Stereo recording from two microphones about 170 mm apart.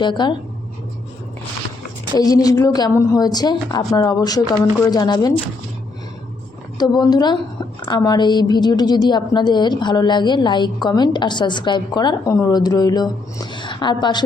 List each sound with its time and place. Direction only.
0.0 s a woman's voice: 25° left (ahead or behind)
2.1 s a woman's voice: 20° left (ahead or behind)
6.7 s a woman's voice: 25° left (ahead or behind)